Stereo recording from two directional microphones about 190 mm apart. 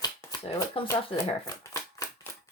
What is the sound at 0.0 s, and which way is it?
Shuffling cards, 20° left (ahead or behind).